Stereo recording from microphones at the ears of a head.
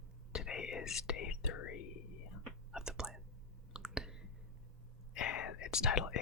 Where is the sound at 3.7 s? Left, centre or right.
Centre.